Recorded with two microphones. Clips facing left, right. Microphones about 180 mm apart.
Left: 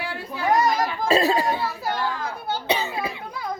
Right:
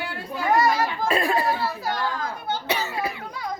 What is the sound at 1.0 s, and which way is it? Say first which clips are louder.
Speech: left 4 dB; 25° left (ahead or behind).